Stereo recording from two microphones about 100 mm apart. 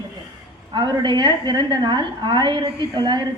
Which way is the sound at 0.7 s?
50° right (ahead or behind).